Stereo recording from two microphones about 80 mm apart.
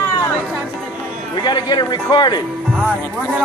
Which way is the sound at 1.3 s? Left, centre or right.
Left.